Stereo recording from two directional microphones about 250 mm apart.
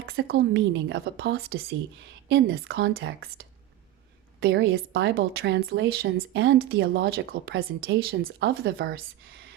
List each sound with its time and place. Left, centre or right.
0.0 s speech: right